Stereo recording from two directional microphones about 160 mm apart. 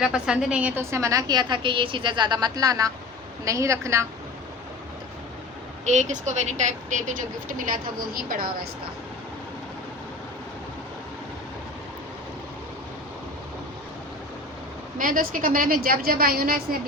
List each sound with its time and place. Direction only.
0.0 s a woman's voice: 5° right (ahead or behind)
5.8 s a woman's voice: 45° right (ahead or behind); by 8.6 s 65° right (ahead or behind)
14.9 s a woman's voice: 60° right (ahead or behind)